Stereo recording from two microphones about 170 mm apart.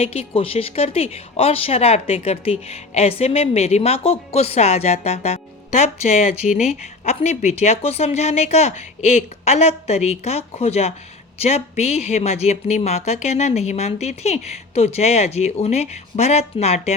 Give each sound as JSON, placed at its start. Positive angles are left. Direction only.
{"t": 0.0, "sound": "speech", "side_deg": 35}